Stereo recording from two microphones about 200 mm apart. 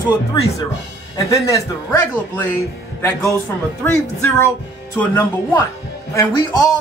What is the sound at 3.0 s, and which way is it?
A man's voice, 15° left (ahead or behind).